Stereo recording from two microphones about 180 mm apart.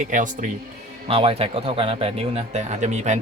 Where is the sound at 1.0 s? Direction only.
30° right (ahead or behind).